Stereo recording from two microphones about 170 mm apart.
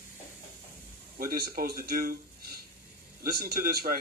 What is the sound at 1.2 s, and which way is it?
Speech, 60° right (ahead or behind).